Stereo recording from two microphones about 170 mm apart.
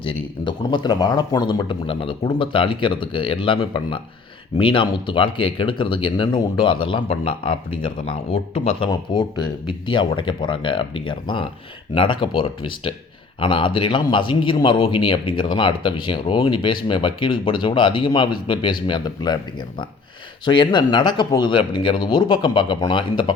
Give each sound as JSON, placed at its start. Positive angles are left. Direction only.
{"t": 0.0, "sound": "a man's voice", "side_deg": 25}